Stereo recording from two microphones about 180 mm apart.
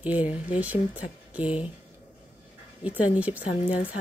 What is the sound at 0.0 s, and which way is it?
Speech, 10° right (ahead or behind).